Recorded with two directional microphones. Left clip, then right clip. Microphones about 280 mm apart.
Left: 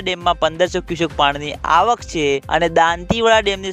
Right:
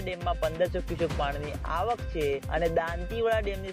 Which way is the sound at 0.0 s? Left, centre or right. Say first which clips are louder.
Left 13 dB; left.